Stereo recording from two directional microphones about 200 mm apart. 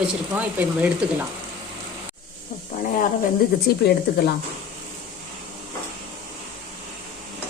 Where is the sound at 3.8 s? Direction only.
55° left (ahead or behind).